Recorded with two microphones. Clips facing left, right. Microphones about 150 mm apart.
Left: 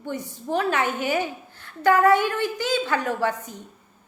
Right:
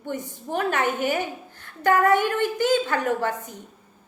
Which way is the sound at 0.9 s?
45° right (ahead or behind).